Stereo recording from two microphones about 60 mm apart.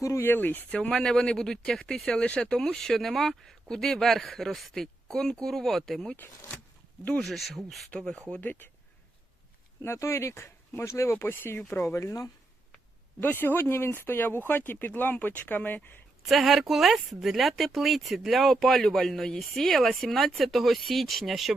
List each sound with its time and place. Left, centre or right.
0.0 s speech: left
0.3 s speech: left
0.7 s speech: centre
7.2 s speech: centre
7.9 s speech: centre
8.4 s speech: left
9.8 s speech: left
11.9 s speech: left
13.1 s speech: left
16.3 s speech: centre